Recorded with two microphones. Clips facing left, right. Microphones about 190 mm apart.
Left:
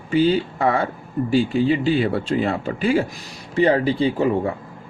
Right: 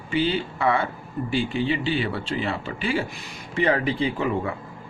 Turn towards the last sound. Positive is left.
turn(degrees=35)  # may be behind; listen again after turning